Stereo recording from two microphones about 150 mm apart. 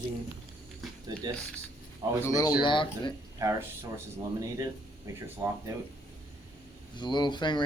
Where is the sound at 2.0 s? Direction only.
25° right (ahead or behind).